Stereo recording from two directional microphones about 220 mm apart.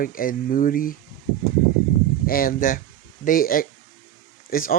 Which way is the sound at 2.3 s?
40° left (ahead or behind).